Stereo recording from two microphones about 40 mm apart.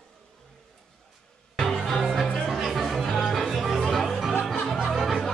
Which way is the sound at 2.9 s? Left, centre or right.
Centre.